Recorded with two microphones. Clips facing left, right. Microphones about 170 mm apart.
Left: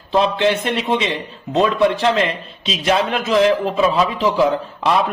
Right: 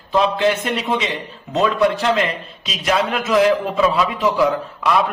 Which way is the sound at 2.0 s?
30° left (ahead or behind).